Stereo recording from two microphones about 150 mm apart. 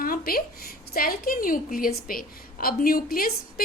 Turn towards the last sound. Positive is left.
turn(degrees=75)  # may be behind; listen again after turning